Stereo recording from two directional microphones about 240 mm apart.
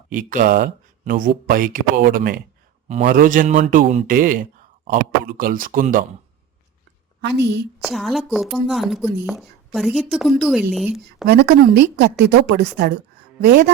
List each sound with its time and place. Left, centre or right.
0.1 s speech: right
7.2 s a woman's voice: right
7.8 s a woman's voice: centre
11.3 s a woman's voice: right